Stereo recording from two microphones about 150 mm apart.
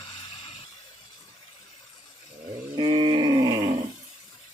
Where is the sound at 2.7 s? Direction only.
35° right (ahead or behind).